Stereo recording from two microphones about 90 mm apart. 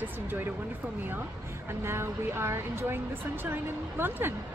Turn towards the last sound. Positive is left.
turn(degrees=-25)  # may be behind; listen again after turning